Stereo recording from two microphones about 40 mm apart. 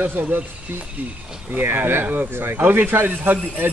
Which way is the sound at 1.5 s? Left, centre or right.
Right.